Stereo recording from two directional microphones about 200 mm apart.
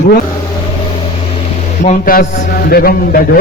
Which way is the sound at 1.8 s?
40° left (ahead or behind).